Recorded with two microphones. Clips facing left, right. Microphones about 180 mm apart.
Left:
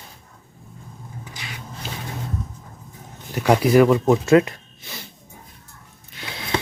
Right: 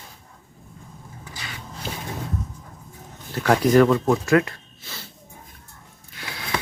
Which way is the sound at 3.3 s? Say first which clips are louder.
Left 1 dB; 10° left (ahead or behind).